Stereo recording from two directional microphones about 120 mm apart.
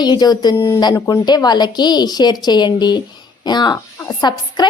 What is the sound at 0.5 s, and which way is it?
Speech, 25° left (ahead or behind).